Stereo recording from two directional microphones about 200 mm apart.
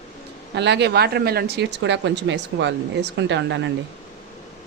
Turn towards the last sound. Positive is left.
turn(degrees=-65)  # may be behind; listen again after turning